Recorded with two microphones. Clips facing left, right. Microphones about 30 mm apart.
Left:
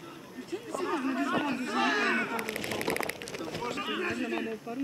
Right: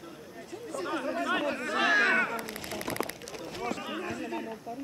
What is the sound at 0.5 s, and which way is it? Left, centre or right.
Chatter, left.